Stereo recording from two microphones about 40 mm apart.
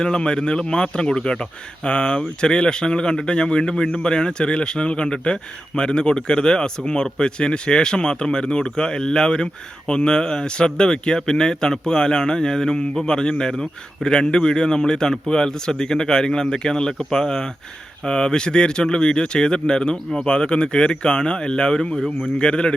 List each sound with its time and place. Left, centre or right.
0.0 s speech: left
21.9 s speech: centre
22.4 s speech: left